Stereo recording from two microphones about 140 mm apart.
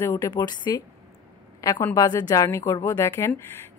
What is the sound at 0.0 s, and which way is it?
A woman's voice, 25° left (ahead or behind).